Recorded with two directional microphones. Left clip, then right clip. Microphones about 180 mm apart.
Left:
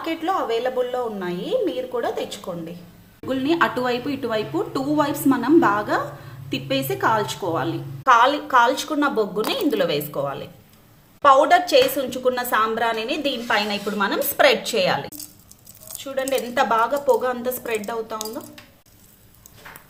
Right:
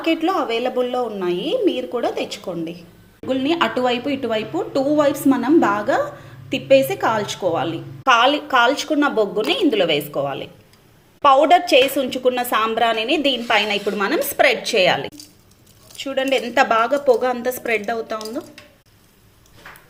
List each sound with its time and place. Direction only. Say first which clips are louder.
0.0 s speech: right 4 dB; 20° right (ahead or behind)
3.2 s a woman's voice: right 1 dB; 5° right (ahead or behind)